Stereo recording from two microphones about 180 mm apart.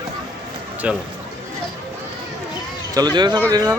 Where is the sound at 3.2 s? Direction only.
25° right (ahead or behind).